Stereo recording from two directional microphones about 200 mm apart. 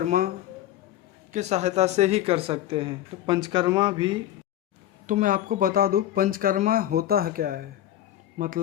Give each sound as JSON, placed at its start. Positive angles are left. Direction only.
{"t": 1.3, "sound": "speech", "side_deg": -35}
{"t": 5.0, "sound": "speech", "side_deg": -40}